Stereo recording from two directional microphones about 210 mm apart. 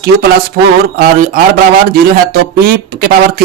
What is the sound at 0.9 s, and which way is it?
Speech, 40° right (ahead or behind).